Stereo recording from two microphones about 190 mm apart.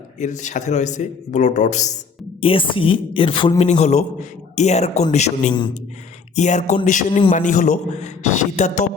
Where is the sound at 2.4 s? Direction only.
25° left (ahead or behind).